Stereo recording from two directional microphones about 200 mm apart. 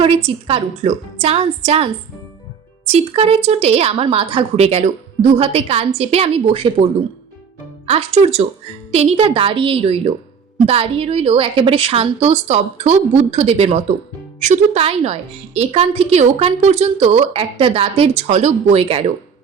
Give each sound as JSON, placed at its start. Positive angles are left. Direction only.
{"t": 0.0, "sound": "a woman's voice", "side_deg": -30}